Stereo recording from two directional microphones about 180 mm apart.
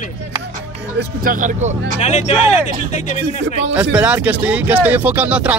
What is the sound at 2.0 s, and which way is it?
Speech, 40° left (ahead or behind).